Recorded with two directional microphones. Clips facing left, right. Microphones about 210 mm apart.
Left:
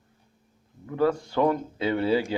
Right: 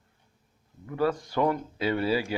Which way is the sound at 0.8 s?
5° right (ahead or behind).